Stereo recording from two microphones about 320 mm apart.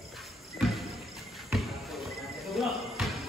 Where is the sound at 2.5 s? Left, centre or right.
Centre.